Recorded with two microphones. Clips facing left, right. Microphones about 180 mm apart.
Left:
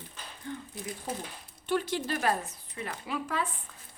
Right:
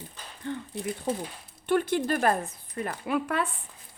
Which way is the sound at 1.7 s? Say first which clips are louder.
Right 5 dB; 55° right (ahead or behind).